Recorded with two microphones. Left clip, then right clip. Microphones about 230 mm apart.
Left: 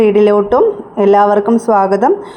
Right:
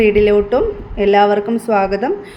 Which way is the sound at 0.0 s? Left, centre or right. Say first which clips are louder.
Left 2 dB; centre.